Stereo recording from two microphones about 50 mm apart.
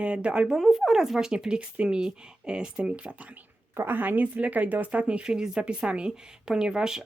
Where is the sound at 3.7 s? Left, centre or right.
Right.